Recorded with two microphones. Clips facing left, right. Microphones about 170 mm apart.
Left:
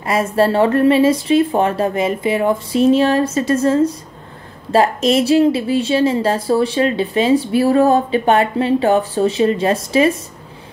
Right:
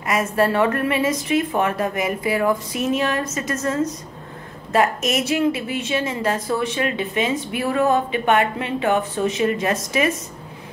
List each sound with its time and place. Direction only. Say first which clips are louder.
0.0 s a woman's voice: left 4 dB; 30° left (ahead or behind)